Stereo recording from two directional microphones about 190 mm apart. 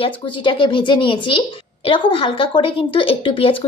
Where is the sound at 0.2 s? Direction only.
25° left (ahead or behind).